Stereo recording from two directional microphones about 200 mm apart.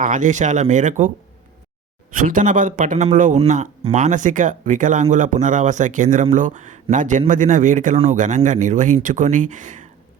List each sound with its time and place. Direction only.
0.0 s a man's voice: 40° right (ahead or behind)
2.1 s a man's voice: 40° right (ahead or behind)